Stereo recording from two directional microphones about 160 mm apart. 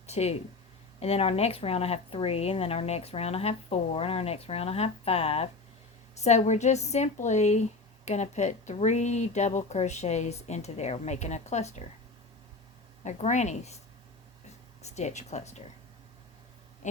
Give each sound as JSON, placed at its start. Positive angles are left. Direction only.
{"t": 0.0, "sound": "a sound", "side_deg": 40}
{"t": 0.9, "sound": "speech", "side_deg": 40}
{"t": 13.1, "sound": "speech", "side_deg": 45}
{"t": 14.8, "sound": "speech", "side_deg": 45}
{"t": 16.8, "sound": "speech", "side_deg": 50}